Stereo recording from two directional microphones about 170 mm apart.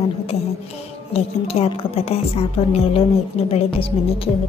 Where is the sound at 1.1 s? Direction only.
35° left (ahead or behind).